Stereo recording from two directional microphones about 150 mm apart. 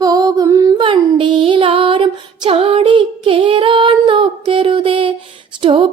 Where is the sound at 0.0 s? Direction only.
25° right (ahead or behind).